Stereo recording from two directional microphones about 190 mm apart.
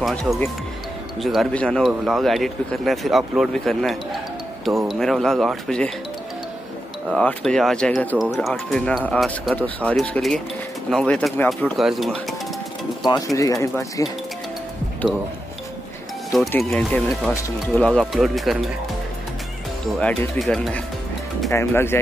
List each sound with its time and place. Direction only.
0.0 s speech: centre (ahead or behind)
7.1 s speech: 5° left (ahead or behind)
13.0 s speech: 20° left (ahead or behind)
16.3 s speech: centre (ahead or behind)
20.0 s speech: 5° left (ahead or behind)
21.5 s speech: 15° left (ahead or behind)